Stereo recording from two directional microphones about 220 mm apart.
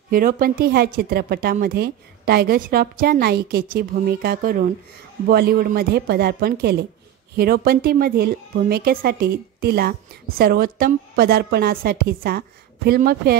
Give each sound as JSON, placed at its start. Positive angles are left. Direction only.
{"t": 0.1, "sound": "a woman's voice", "side_deg": -40}